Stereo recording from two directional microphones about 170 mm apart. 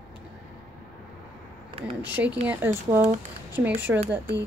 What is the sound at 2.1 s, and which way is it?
Speech, 10° right (ahead or behind).